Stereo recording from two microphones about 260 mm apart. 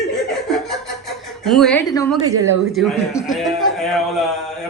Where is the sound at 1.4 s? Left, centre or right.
Centre.